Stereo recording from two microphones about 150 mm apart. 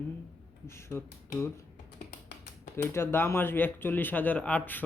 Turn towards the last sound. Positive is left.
turn(degrees=10)  # may be behind; listen again after turning